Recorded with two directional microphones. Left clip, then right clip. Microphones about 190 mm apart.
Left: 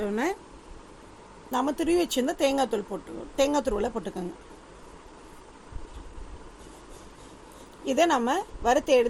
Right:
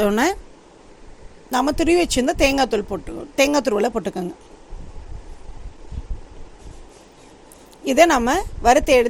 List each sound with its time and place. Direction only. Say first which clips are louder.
0.0 s a woman's voice: right 10 dB; 55° right (ahead or behind)
1.5 s speech: right 8 dB; 45° right (ahead or behind)
7.9 s speech: right 8 dB; 45° right (ahead or behind)